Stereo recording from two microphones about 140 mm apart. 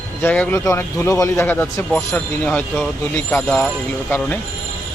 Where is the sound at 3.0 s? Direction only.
15° left (ahead or behind).